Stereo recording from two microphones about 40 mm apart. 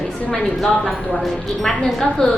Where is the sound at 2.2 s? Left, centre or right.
Centre.